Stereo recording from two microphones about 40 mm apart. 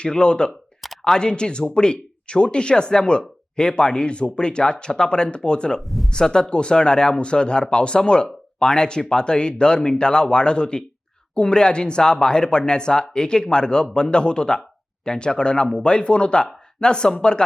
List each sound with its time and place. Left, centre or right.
0.0 s speech: left